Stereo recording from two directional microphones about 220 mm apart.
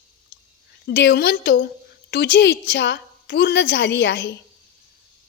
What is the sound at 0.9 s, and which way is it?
Speech, 50° left (ahead or behind).